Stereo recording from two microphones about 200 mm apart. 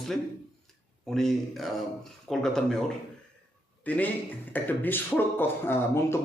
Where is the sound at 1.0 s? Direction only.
Centre (ahead or behind).